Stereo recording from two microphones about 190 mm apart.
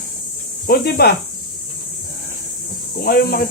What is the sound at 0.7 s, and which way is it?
Speech, 55° left (ahead or behind).